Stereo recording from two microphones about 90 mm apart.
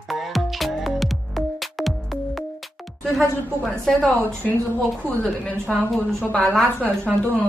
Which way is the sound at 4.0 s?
15° left (ahead or behind).